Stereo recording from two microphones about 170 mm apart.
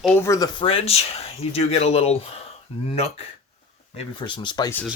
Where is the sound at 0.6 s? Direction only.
35° left (ahead or behind).